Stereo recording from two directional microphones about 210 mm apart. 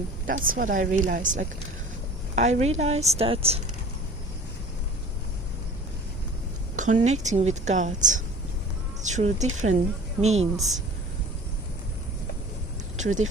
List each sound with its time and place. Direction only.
0.3 s a woman's voice: 40° right (ahead or behind)
6.7 s a woman's voice: 35° right (ahead or behind)
13.0 s speech: 35° right (ahead or behind)